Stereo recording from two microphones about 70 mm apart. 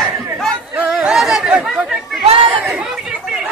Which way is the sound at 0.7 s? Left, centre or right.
Centre.